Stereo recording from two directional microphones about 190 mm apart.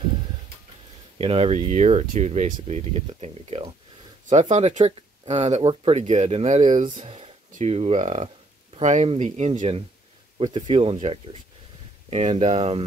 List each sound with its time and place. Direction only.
1.1 s speech: 30° right (ahead or behind)